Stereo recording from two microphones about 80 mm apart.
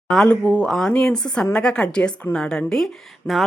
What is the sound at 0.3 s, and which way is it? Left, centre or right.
A woman's voice, centre.